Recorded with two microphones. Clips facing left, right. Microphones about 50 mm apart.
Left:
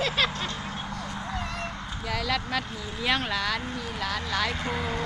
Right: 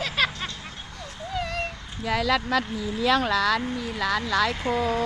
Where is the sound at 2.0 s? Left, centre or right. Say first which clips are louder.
Right 6 dB; right.